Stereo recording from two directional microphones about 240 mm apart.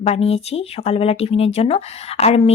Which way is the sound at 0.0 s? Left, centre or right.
Left.